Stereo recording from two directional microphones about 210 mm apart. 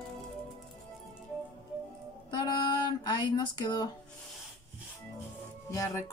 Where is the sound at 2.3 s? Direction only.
20° left (ahead or behind).